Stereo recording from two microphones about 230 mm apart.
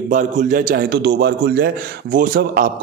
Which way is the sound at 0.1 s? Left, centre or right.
Right.